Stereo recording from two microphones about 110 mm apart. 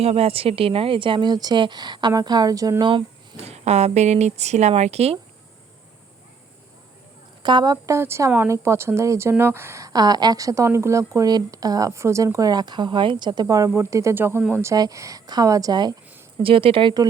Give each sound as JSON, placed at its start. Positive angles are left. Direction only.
{"t": 0.0, "sound": "speech", "side_deg": -65}
{"t": 3.3, "sound": "speech", "side_deg": -70}
{"t": 7.4, "sound": "a woman's voice", "side_deg": -40}
{"t": 13.7, "sound": "a woman's voice", "side_deg": -25}
{"t": 16.4, "sound": "speech", "side_deg": -55}